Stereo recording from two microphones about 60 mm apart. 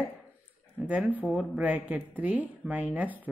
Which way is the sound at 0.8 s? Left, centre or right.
Right.